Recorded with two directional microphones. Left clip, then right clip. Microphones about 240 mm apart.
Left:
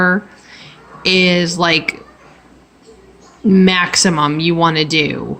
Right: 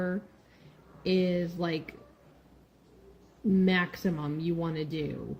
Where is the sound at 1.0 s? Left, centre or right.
Left.